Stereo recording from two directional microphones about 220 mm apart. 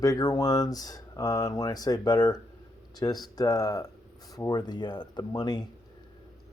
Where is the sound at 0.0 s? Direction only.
15° left (ahead or behind).